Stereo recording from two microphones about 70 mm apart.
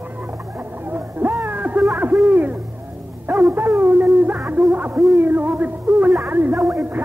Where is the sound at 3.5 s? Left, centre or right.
Right.